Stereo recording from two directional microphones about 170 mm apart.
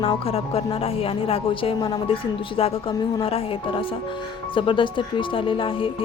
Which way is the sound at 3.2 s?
35° left (ahead or behind).